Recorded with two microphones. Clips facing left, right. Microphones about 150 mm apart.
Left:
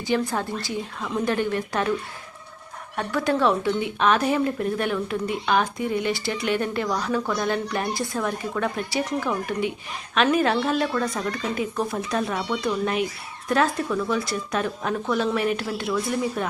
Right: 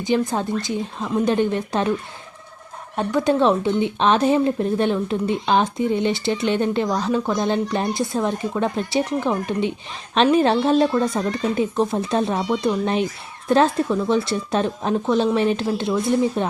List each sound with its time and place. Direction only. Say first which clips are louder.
0.0 s speech: right 4 dB; 20° right (ahead or behind)
2.9 s speech: right 5 dB; 20° right (ahead or behind)